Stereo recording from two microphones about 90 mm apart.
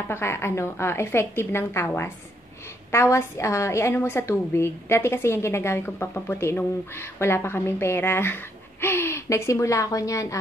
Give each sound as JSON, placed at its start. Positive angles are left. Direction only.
{"t": 0.1, "sound": "a woman's voice", "side_deg": 30}